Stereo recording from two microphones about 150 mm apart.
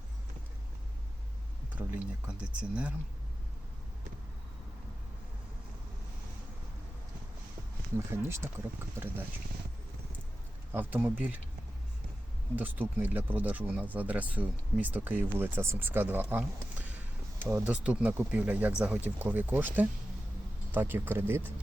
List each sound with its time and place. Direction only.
2.2 s speech: 10° right (ahead or behind)
7.9 s speech: 15° right (ahead or behind)
10.7 s speech: 10° right (ahead or behind)
12.5 s speech: 10° right (ahead or behind)